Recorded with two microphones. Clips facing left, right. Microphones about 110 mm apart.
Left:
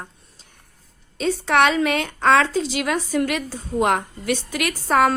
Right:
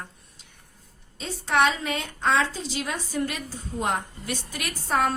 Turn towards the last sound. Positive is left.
turn(degrees=90)